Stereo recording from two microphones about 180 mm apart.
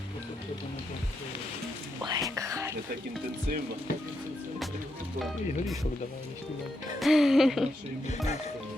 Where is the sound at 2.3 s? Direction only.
15° right (ahead or behind).